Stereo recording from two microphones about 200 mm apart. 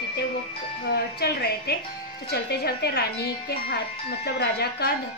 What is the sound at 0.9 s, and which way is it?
Speech, 55° left (ahead or behind).